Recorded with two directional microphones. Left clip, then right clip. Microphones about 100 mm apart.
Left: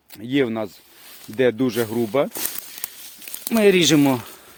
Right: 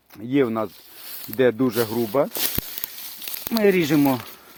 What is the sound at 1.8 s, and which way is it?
Speech, 35° left (ahead or behind).